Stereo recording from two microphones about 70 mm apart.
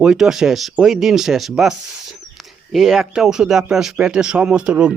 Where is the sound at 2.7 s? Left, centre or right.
Centre.